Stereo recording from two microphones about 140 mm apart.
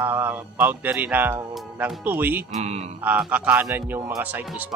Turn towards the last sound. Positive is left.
turn(degrees=-10)  # may be behind; listen again after turning